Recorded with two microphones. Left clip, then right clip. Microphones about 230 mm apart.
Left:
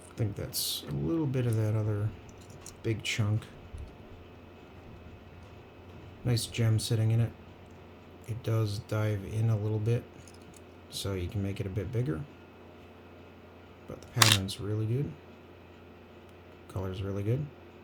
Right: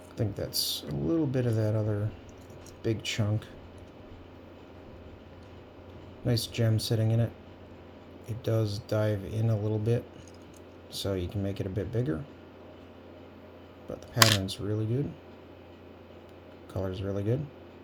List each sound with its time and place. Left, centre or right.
0.2 s a man's voice: centre
6.2 s a man's voice: centre
8.3 s a man's voice: centre
14.1 s speech: centre
16.7 s a man's voice: centre